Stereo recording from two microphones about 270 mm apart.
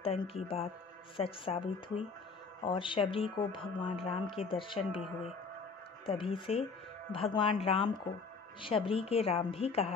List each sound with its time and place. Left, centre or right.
0.0 s speech: left
6.0 s speech: centre